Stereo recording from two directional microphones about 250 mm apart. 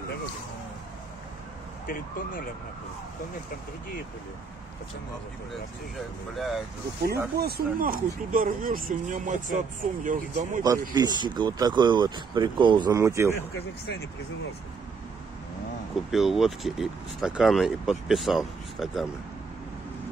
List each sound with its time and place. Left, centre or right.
1.9 s speech: left
6.3 s speech: centre
7.3 s speech: right
10.9 s speech: centre
16.1 s speech: centre